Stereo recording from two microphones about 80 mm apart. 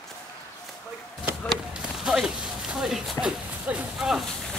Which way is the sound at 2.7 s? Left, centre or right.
Centre.